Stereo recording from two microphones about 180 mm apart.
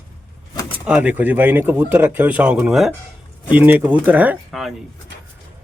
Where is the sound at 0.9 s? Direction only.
5° right (ahead or behind).